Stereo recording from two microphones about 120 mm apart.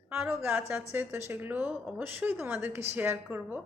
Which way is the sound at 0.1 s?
20° right (ahead or behind).